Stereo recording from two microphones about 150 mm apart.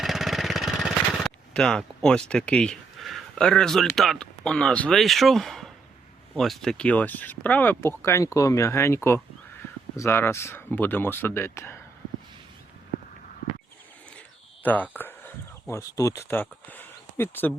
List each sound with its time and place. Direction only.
0.0 s vehicle: centre (ahead or behind)
6.3 s speech: 5° left (ahead or behind)
14.6 s speech: 10° left (ahead or behind)